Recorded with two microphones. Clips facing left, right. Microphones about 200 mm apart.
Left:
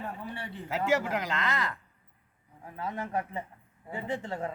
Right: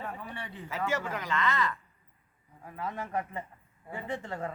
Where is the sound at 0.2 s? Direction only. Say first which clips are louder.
Left 2 dB; 30° left (ahead or behind).